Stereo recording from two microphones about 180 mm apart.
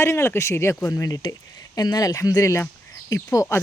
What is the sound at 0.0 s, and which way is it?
Speech, 15° left (ahead or behind).